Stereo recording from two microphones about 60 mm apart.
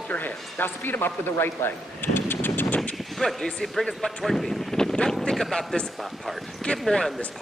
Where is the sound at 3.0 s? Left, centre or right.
Centre.